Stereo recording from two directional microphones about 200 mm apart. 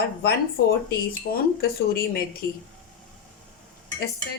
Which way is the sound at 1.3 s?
50° left (ahead or behind).